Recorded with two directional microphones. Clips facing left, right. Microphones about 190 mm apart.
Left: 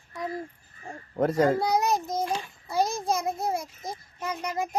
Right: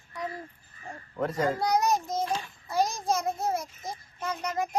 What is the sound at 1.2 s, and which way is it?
Speech, 40° left (ahead or behind).